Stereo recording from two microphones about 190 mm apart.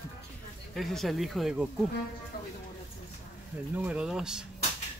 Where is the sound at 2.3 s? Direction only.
55° left (ahead or behind).